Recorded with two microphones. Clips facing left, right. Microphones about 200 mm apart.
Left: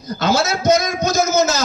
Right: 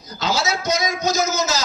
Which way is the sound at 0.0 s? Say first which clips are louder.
Left 5 dB; 55° left (ahead or behind).